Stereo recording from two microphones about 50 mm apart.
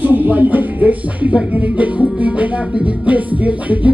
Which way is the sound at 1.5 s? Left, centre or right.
Right.